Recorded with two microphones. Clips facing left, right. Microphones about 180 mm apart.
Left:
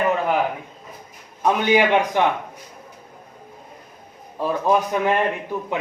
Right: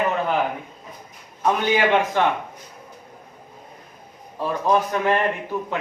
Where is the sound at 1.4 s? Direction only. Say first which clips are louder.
Left 2 dB; 15° left (ahead or behind).